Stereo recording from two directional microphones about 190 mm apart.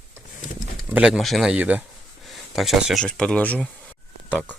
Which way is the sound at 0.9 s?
Centre (ahead or behind).